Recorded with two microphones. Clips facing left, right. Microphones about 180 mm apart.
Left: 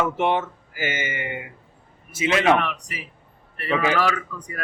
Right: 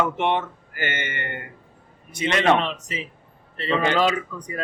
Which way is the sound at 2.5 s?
20° right (ahead or behind).